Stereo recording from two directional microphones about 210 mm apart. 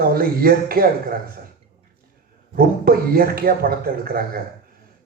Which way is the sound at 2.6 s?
45° right (ahead or behind).